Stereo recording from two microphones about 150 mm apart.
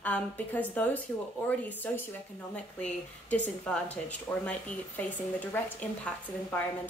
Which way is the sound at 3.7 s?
10° left (ahead or behind).